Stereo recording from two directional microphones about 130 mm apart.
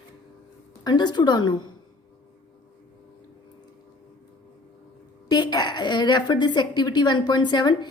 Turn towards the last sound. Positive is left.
turn(degrees=35)  # may be behind; listen again after turning